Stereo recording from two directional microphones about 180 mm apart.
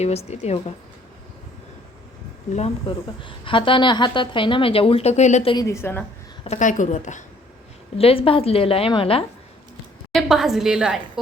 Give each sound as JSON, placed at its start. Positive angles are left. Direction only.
{"t": 0.0, "sound": "a woman's voice", "side_deg": 35}
{"t": 2.5, "sound": "a woman's voice", "side_deg": 40}
{"t": 5.5, "sound": "a woman's voice", "side_deg": 15}
{"t": 6.4, "sound": "a woman's voice", "side_deg": 40}
{"t": 7.9, "sound": "a woman's voice", "side_deg": 30}
{"t": 10.1, "sound": "a woman's voice", "side_deg": 0}